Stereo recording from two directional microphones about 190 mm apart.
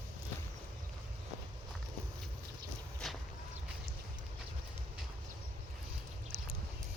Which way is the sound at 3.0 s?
Centre (ahead or behind).